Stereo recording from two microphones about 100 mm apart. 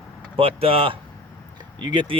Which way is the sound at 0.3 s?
70° right (ahead or behind).